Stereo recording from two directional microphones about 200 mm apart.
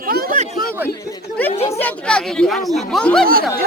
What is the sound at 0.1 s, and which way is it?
Chatter, 45° right (ahead or behind).